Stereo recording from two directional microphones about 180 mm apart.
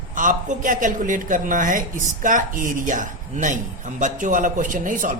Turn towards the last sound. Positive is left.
turn(degrees=-45)  # may be behind; listen again after turning